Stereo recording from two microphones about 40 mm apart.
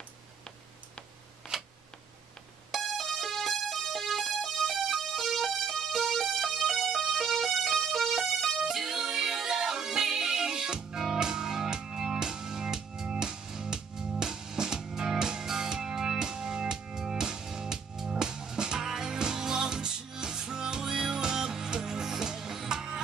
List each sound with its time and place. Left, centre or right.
1.5 s camera: centre
2.7 s music: centre